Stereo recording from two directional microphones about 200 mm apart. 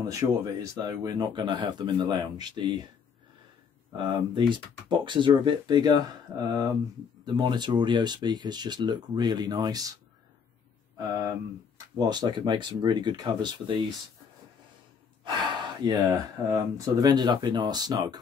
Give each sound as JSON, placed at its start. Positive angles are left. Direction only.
{"t": 0.0, "sound": "speech", "side_deg": -15}
{"t": 3.9, "sound": "speech", "side_deg": -25}
{"t": 11.1, "sound": "speech", "side_deg": -20}
{"t": 15.2, "sound": "speech", "side_deg": -20}